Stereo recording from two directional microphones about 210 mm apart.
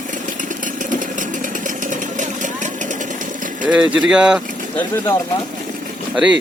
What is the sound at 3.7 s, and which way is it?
Speech, 5° right (ahead or behind).